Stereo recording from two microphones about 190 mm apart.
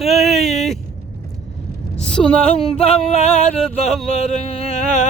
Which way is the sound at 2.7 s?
30° left (ahead or behind).